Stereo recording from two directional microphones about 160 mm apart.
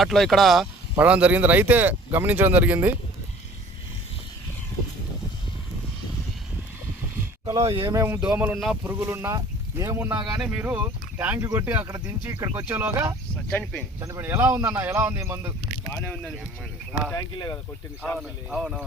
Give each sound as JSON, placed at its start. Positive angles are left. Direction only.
{"t": 0.0, "sound": "speech", "side_deg": 0}
{"t": 7.6, "sound": "speech", "side_deg": -30}
{"t": 7.9, "sound": "speech", "side_deg": -15}
{"t": 13.5, "sound": "speech", "side_deg": 10}
{"t": 14.0, "sound": "speech", "side_deg": -15}
{"t": 15.9, "sound": "speech", "side_deg": 15}
{"t": 17.2, "sound": "speech", "side_deg": 25}
{"t": 18.0, "sound": "speech", "side_deg": 5}